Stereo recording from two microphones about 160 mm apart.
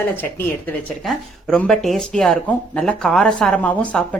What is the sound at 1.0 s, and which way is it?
Speech, centre (ahead or behind).